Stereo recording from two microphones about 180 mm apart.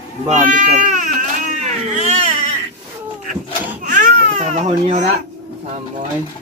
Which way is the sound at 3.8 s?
45° right (ahead or behind).